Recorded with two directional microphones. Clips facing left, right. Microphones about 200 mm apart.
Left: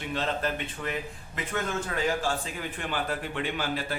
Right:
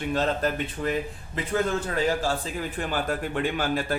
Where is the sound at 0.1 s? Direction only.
40° right (ahead or behind).